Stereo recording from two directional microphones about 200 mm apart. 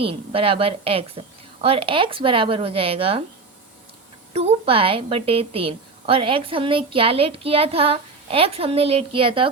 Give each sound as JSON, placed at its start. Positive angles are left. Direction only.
{"t": 0.0, "sound": "a woman's voice", "side_deg": -30}
{"t": 4.4, "sound": "a woman's voice", "side_deg": -30}